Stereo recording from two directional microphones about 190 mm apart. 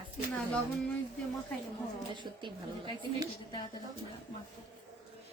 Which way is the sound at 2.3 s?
25° right (ahead or behind).